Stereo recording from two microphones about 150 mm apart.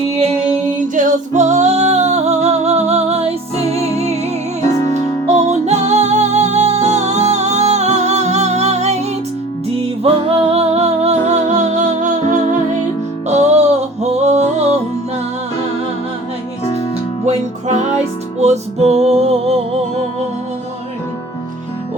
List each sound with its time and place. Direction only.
0.9 s music: 50° right (ahead or behind)
5.5 s music: 45° right (ahead or behind)
18.3 s music: 50° right (ahead or behind)